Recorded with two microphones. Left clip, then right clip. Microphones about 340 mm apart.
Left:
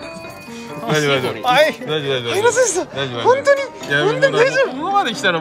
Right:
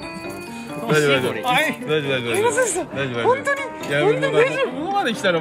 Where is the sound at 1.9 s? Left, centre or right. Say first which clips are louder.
Left 1 dB; left.